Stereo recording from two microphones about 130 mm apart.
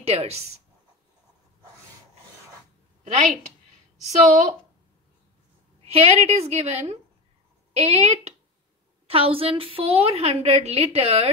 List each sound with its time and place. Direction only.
0.0 s a woman's voice: 55° right (ahead or behind)
4.0 s a woman's voice: 65° right (ahead or behind)
5.9 s a woman's voice: 50° right (ahead or behind)